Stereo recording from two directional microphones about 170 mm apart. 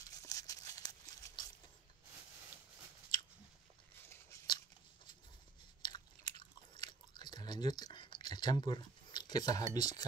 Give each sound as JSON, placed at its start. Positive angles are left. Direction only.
{"t": 0.1, "sound": "tearing", "side_deg": 20}
{"t": 4.1, "sound": "a sound", "side_deg": 15}
{"t": 5.8, "sound": "biting", "side_deg": 25}